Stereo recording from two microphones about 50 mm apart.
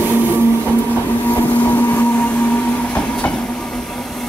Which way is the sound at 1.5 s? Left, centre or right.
Left.